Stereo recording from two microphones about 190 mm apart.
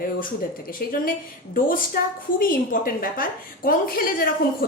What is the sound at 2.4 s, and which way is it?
A woman's voice, 50° left (ahead or behind).